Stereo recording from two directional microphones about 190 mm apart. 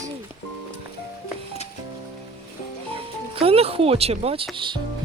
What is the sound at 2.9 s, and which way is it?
Speech, 30° right (ahead or behind).